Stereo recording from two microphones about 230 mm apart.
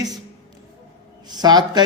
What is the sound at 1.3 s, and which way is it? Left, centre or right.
Speech, centre.